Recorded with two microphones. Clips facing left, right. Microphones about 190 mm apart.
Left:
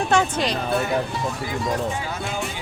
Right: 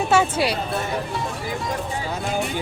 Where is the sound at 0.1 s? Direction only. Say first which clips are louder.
Right 2 dB; 10° right (ahead or behind).